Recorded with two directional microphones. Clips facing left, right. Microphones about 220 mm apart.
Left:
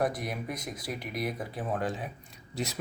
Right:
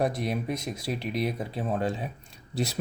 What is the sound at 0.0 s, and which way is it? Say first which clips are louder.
Speech: right 3 dB; 25° right (ahead or behind).